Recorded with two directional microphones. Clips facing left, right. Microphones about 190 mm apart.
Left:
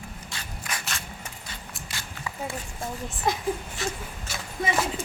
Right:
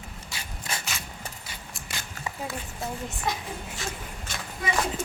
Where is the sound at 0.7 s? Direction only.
25° right (ahead or behind).